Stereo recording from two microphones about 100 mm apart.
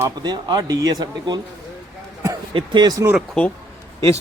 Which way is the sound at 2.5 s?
55° right (ahead or behind).